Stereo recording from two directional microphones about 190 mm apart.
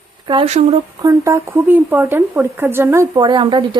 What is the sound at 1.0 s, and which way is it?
Speech, 15° right (ahead or behind).